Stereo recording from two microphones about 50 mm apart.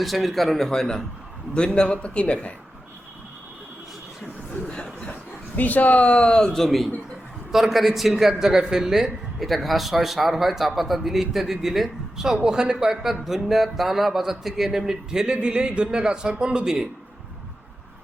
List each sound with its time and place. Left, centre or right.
0.0 s speech: centre; by 2.5 s left
4.6 s a sound: centre
5.5 s speech: left; by 6.7 s centre
6.7 s speech: centre